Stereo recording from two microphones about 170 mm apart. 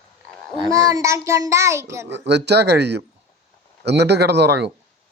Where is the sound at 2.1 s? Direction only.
90° right.